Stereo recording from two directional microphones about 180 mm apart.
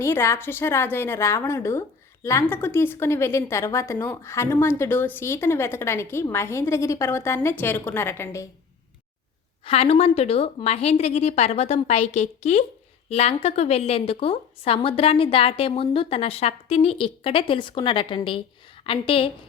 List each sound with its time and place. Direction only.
0.0 s speech: 15° left (ahead or behind)
9.6 s a woman's voice: 35° left (ahead or behind)